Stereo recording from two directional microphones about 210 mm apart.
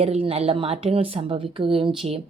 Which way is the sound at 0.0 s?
25° right (ahead or behind).